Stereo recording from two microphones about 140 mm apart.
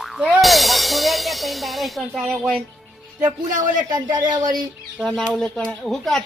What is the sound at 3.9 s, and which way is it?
Speech, 30° right (ahead or behind).